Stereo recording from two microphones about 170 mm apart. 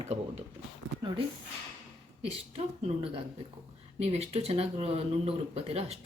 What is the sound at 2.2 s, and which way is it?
Speech, 35° right (ahead or behind).